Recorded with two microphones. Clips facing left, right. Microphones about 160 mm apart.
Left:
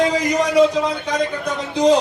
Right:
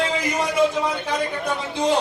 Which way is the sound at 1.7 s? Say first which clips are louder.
Left 7 dB; 40° left (ahead or behind).